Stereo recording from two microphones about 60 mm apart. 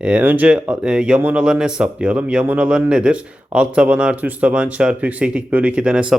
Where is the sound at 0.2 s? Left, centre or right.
Right.